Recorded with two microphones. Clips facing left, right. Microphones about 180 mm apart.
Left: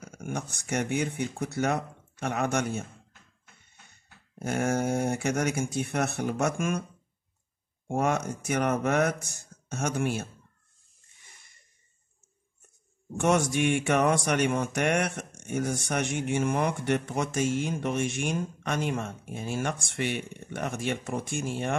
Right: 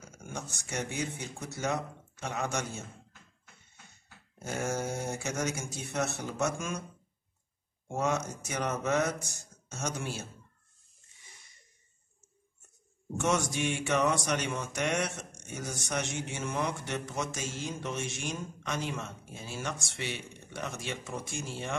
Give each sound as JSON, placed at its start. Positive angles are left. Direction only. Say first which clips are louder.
{"t": 0.1, "sound": "speech", "louder": "left 7 dB", "side_deg": 60}
{"t": 3.9, "sound": "speech", "louder": "left 4 dB", "side_deg": 60}
{"t": 7.9, "sound": "speech", "louder": "left 4 dB", "side_deg": 55}
{"t": 13.2, "sound": "speech", "louder": "left 6 dB", "side_deg": 60}